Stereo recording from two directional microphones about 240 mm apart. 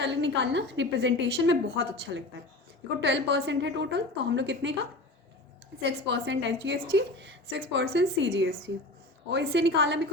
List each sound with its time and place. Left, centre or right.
0.0 s a woman's voice: right
5.8 s a woman's voice: right